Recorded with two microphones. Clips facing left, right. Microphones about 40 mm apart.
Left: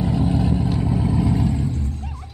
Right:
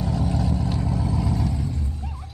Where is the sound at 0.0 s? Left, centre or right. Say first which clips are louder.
Left 5 dB; left.